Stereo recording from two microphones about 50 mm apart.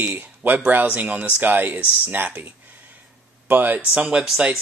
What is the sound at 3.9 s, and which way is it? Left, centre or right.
Speech, centre.